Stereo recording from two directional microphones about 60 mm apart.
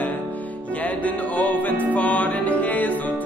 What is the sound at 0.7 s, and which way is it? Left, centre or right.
Music, left.